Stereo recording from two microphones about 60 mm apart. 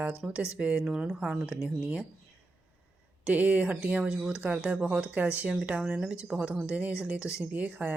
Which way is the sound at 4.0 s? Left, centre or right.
Centre.